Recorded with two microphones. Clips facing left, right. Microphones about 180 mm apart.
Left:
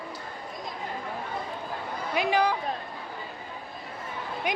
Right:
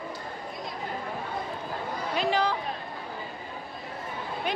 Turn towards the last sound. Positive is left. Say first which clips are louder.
# left 1 dB
turn(degrees=15)  # may be behind; listen again after turning